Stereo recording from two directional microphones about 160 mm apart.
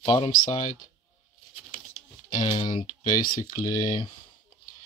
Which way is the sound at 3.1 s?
60° left (ahead or behind).